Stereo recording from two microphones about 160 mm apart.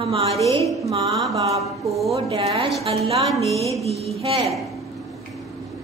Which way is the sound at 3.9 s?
40° right (ahead or behind).